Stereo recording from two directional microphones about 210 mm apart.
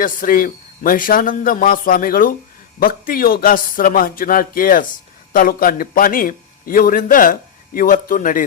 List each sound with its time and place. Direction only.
0.0 s a man's voice: 40° left (ahead or behind)